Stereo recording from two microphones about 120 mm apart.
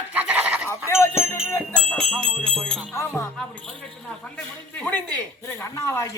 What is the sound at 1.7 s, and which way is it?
Jingle bell, 5° left (ahead or behind).